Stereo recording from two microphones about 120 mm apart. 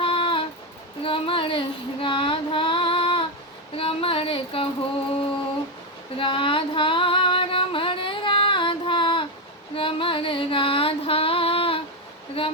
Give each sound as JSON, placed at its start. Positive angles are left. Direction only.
{"t": 0.0, "sound": "music", "side_deg": 45}
{"t": 1.0, "sound": "female singing", "side_deg": 50}
{"t": 3.8, "sound": "a sound", "side_deg": 50}
{"t": 6.1, "sound": "female singing", "side_deg": 45}
{"t": 9.7, "sound": "music", "side_deg": 50}
{"t": 12.4, "sound": "a sound", "side_deg": 50}